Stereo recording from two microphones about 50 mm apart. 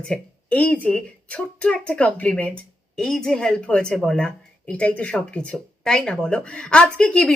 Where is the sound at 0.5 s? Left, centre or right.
Left.